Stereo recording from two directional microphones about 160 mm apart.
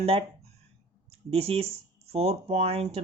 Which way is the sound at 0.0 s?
40° right (ahead or behind).